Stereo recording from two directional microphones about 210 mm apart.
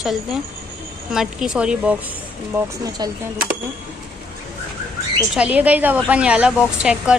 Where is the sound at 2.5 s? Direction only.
15° right (ahead or behind).